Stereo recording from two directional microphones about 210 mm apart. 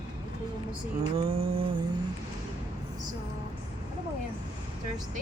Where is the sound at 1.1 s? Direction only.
25° right (ahead or behind).